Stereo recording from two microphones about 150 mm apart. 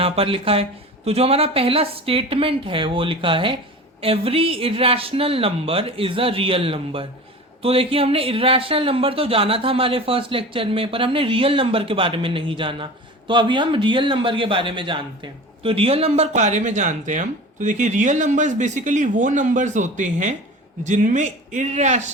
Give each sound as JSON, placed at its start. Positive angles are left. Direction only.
{"t": 0.0, "sound": "a man's voice", "side_deg": -40}